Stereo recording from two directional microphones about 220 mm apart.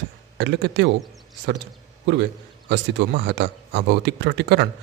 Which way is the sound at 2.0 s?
50° right (ahead or behind).